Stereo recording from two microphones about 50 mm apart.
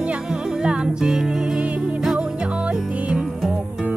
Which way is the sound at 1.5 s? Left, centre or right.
Right.